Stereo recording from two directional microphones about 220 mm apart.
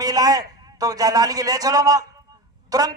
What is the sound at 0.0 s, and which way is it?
A man's voice, 15° right (ahead or behind).